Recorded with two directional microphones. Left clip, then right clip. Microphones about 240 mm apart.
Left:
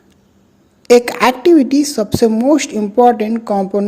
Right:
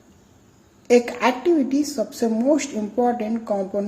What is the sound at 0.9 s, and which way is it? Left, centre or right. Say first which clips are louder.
A woman's voice: left 8 dB; left.